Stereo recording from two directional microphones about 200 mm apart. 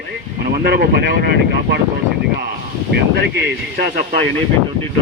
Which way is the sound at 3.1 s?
55° right (ahead or behind).